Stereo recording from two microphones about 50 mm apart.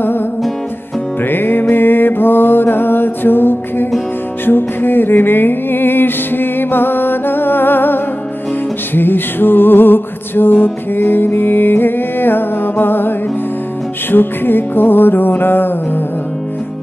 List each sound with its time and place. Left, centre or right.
1.3 s music: left
14.1 s music: left